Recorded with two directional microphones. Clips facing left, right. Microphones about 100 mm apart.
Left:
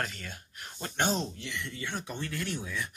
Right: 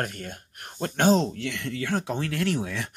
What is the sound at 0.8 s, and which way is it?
Speech, 80° right.